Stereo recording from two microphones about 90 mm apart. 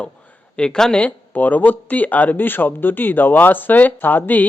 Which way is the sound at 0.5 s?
10° left (ahead or behind).